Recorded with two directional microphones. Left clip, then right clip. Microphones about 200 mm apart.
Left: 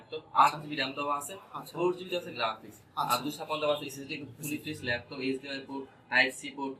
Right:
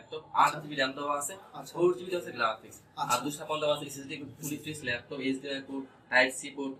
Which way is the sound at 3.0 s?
Centre (ahead or behind).